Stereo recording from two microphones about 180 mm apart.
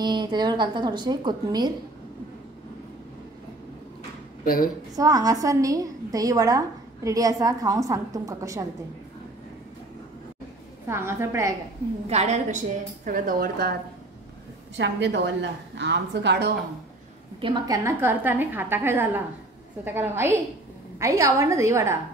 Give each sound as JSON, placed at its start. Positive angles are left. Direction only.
{"t": 0.0, "sound": "a woman's voice", "side_deg": -25}
{"t": 4.9, "sound": "a woman's voice", "side_deg": -20}
{"t": 10.9, "sound": "a woman's voice", "side_deg": -15}
{"t": 12.1, "sound": "a woman's voice", "side_deg": -40}
{"t": 14.8, "sound": "a woman's voice", "side_deg": -75}
{"t": 17.4, "sound": "a woman's voice", "side_deg": -25}